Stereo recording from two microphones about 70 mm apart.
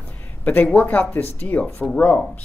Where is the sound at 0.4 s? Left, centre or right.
Left.